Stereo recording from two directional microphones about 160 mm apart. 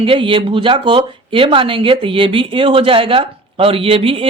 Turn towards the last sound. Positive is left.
turn(degrees=-35)  # may be behind; listen again after turning